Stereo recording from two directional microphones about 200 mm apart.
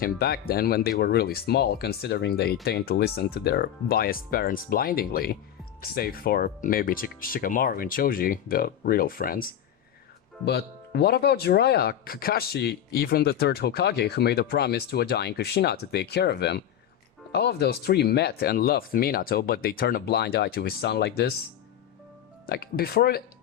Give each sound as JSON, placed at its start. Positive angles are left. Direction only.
{"t": 0.0, "sound": "speech", "side_deg": 50}
{"t": 10.4, "sound": "speech", "side_deg": 55}
{"t": 22.4, "sound": "speech", "side_deg": 50}